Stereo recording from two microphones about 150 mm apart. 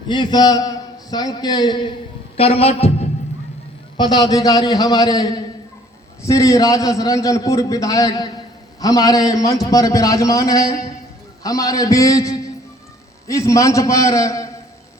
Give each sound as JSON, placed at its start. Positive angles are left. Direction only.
{"t": 0.1, "sound": "a man's voice", "side_deg": 30}
{"t": 2.3, "sound": "a man's voice", "side_deg": 40}
{"t": 3.9, "sound": "a man's voice", "side_deg": 30}